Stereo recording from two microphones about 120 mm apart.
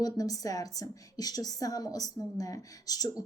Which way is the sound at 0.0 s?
30° left (ahead or behind).